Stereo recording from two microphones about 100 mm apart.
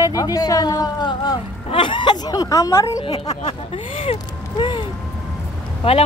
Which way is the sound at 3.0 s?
80° left.